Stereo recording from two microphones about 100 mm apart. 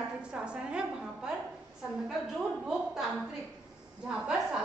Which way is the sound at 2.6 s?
5° right (ahead or behind).